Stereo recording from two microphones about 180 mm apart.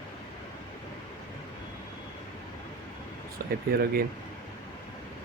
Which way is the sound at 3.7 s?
55° right (ahead or behind).